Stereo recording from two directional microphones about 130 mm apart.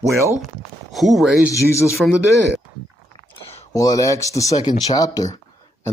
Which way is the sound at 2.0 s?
Centre (ahead or behind).